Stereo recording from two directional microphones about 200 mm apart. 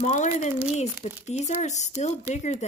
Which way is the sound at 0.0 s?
35° left (ahead or behind).